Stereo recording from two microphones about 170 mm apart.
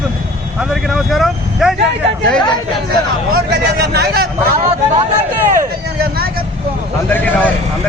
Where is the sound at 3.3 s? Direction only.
70° right (ahead or behind).